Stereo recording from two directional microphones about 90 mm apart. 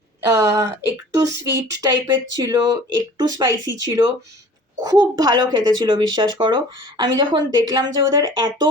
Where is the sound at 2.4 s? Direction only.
45° right (ahead or behind).